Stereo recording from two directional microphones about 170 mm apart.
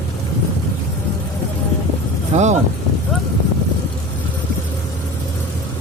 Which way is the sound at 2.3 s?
40° right (ahead or behind).